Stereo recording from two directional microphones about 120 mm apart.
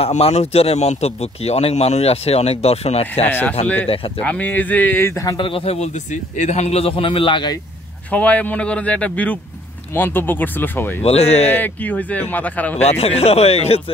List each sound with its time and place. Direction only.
0.0 s speech: 60° left (ahead or behind)
3.3 s speech: 15° left (ahead or behind)
3.8 s a man's voice: 50° left (ahead or behind)
4.2 s speech: 10° left (ahead or behind); by 5.4 s 25° left (ahead or behind)
5.4 s speech: 50° left (ahead or behind)
6.3 s a man's voice: 75° left (ahead or behind); by 7.5 s 40° left (ahead or behind)
8.1 s speech: 10° left (ahead or behind)
11.0 s speech: 60° left (ahead or behind)
11.5 s speech: 15° left (ahead or behind)
12.8 s speech: 60° left (ahead or behind)